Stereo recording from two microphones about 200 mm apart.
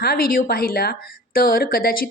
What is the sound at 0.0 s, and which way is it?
A woman's voice, 50° left (ahead or behind).